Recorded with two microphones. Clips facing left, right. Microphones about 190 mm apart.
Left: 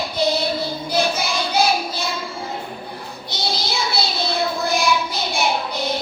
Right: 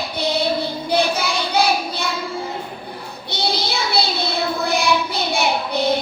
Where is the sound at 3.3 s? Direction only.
60° right (ahead or behind).